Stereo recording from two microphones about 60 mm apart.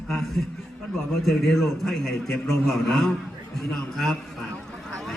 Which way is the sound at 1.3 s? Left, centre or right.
Centre.